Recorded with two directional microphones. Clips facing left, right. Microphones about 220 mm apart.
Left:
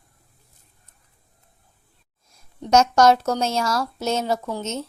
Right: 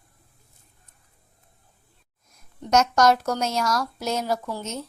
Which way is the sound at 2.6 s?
30° left (ahead or behind).